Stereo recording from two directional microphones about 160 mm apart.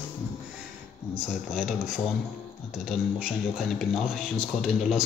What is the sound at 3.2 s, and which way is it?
Speech, centre (ahead or behind).